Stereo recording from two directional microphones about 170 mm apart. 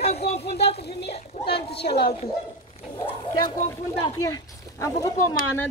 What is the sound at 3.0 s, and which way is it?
Speech, 35° left (ahead or behind).